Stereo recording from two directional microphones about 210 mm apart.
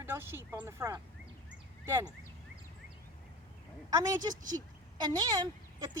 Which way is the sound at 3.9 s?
15° right (ahead or behind).